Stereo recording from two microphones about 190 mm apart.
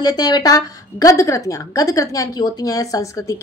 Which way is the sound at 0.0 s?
20° left (ahead or behind).